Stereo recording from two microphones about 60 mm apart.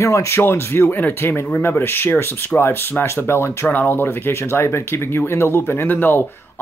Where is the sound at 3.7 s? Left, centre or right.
Left.